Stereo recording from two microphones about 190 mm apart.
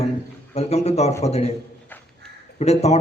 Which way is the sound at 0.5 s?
35° left (ahead or behind).